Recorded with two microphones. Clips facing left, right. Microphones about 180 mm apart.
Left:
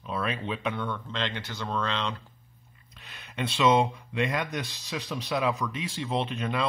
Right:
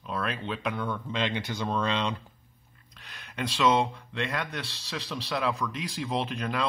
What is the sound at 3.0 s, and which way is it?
Speech, 5° left (ahead or behind).